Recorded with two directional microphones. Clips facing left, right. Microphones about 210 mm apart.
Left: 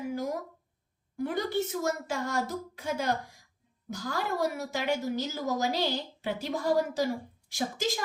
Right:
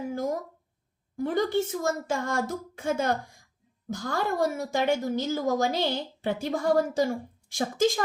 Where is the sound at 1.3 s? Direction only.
45° right (ahead or behind).